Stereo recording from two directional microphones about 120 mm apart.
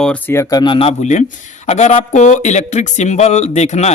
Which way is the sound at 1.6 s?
70° left (ahead or behind).